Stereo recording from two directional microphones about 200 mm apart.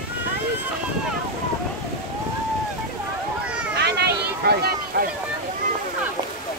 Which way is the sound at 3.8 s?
55° right (ahead or behind).